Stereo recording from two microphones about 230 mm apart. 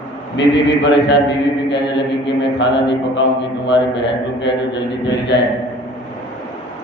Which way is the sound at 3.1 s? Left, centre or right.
Left.